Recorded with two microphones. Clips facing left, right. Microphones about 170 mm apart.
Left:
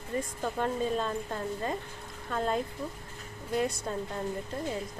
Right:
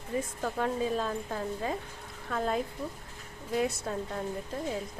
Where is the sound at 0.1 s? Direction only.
Centre (ahead or behind).